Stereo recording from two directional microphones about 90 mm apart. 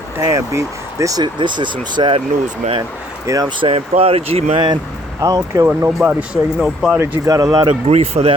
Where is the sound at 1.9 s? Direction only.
75° right (ahead or behind).